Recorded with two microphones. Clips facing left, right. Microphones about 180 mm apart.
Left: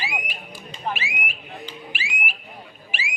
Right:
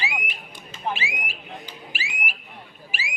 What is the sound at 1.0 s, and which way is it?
Speech, 35° right (ahead or behind).